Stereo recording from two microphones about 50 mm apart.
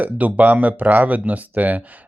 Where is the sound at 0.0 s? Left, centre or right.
Right.